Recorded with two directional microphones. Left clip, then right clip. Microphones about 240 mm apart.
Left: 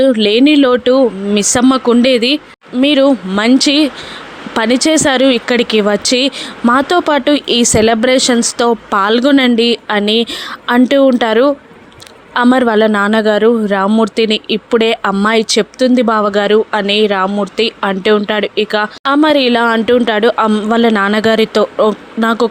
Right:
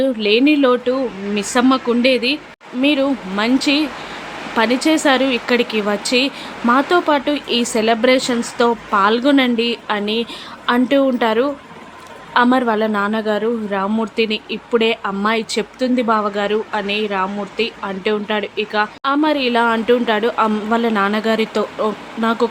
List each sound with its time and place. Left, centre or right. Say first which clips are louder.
0.0 s a man's voice: left 5 dB; left